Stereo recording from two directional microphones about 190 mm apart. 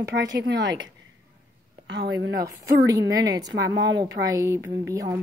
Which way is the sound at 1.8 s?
65° right (ahead or behind).